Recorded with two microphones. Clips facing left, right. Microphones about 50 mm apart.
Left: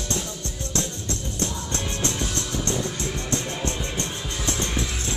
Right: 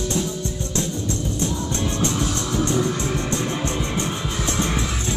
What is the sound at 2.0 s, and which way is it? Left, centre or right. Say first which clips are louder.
Music: right 4 dB; centre.